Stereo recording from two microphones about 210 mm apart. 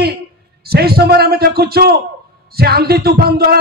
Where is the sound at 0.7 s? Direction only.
50° right (ahead or behind).